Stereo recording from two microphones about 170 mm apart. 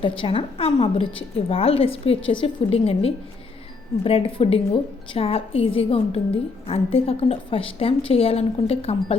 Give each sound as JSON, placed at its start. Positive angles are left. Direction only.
{"t": 0.0, "sound": "a woman's voice", "side_deg": 30}